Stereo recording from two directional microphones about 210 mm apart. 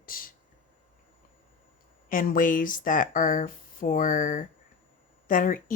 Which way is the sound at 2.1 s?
40° left (ahead or behind).